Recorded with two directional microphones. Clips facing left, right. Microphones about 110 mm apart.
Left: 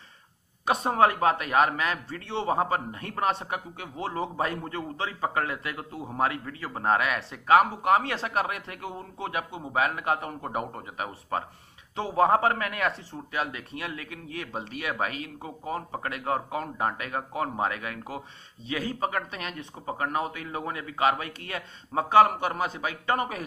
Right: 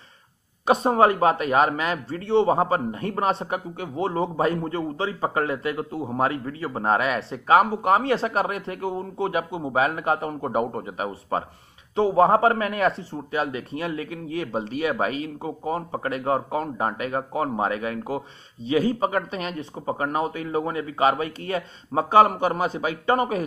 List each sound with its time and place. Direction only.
0.9 s speech: 10° right (ahead or behind)
3.3 s a man's voice: 25° right (ahead or behind)
7.4 s speech: 5° right (ahead or behind)
9.6 s a man's voice: 25° right (ahead or behind)
10.0 s speech: centre (ahead or behind)
10.4 s a man's voice: 20° right (ahead or behind)